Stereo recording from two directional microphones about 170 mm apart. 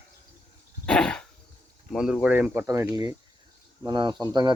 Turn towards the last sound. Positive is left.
turn(degrees=-25)  # may be behind; listen again after turning